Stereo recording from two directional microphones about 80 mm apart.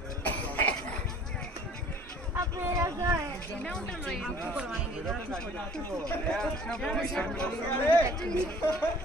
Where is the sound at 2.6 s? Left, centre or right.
Right.